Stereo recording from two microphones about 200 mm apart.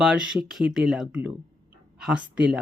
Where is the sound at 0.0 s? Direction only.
5° right (ahead or behind).